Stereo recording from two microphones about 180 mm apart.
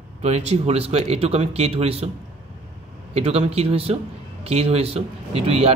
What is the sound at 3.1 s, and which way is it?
Speech, 35° right (ahead or behind).